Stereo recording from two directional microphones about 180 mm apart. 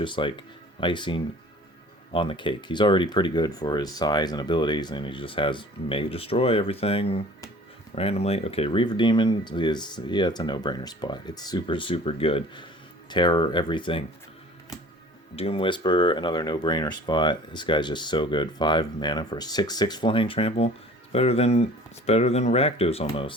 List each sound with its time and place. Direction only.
0.0 s speech: 25° left (ahead or behind)
15.4 s speech: 30° left (ahead or behind)